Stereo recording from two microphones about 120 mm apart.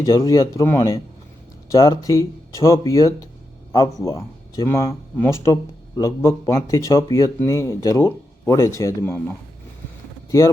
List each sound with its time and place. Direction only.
0.0 s speech: 30° left (ahead or behind)